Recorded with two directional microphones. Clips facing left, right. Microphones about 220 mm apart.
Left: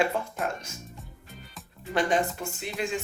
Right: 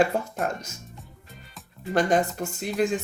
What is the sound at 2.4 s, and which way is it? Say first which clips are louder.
Speech: right 7 dB; 45° right (ahead or behind).